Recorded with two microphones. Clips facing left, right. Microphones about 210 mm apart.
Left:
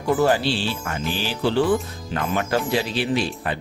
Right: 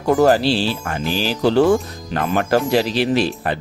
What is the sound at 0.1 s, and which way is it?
Speech, 40° right (ahead or behind).